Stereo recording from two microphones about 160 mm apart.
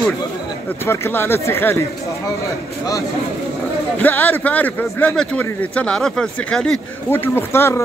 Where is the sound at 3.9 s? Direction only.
10° left (ahead or behind).